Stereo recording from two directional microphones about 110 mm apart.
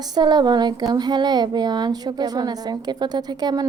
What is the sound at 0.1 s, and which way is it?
Speech, 40° right (ahead or behind).